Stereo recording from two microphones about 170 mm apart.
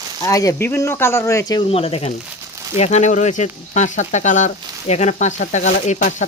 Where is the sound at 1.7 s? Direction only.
35° left (ahead or behind).